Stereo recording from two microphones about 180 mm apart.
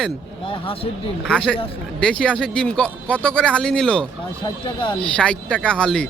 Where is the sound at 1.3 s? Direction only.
5° left (ahead or behind).